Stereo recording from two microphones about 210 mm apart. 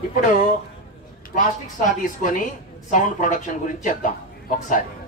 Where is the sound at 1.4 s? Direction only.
40° left (ahead or behind).